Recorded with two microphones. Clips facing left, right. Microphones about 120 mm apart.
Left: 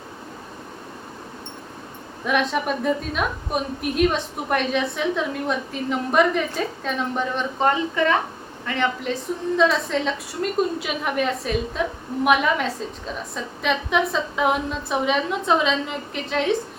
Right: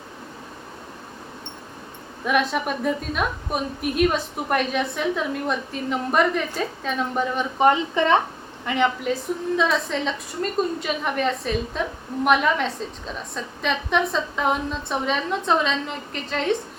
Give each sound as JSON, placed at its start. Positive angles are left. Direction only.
{"t": 2.2, "sound": "a woman's voice", "side_deg": 0}
{"t": 7.6, "sound": "a woman's voice", "side_deg": -20}
{"t": 9.6, "sound": "a woman's voice", "side_deg": 0}